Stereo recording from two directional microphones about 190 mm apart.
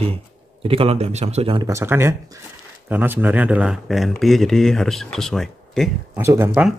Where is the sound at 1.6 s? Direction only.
15° right (ahead or behind); by 5.9 s centre (ahead or behind).